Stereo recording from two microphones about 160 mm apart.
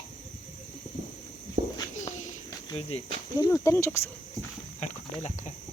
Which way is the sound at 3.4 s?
15° left (ahead or behind).